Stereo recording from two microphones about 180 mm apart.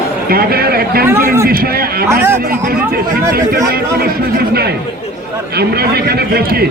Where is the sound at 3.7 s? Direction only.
55° right (ahead or behind).